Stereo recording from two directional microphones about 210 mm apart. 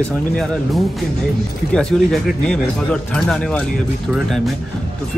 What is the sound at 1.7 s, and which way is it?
Speech, 5° left (ahead or behind).